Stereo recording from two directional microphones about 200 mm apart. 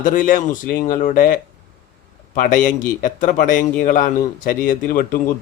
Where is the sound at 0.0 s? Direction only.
40° left (ahead or behind).